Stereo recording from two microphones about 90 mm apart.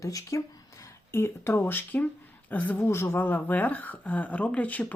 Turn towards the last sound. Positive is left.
turn(degrees=15)  # may be behind; listen again after turning